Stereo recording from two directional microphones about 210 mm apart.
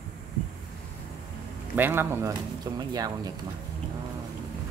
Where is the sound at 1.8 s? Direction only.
10° right (ahead or behind).